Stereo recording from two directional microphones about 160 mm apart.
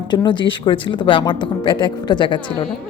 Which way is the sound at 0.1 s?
30° left (ahead or behind).